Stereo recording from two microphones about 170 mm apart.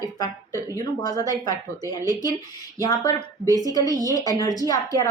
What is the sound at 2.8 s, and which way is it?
A woman's voice, 20° left (ahead or behind).